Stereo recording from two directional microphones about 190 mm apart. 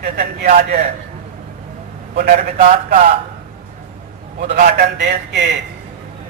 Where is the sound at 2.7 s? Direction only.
45° right (ahead or behind).